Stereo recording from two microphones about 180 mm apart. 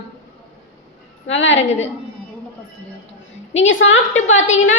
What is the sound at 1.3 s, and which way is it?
Speech, 90° left.